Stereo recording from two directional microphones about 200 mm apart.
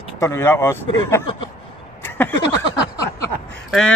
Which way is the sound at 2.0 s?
10° left (ahead or behind).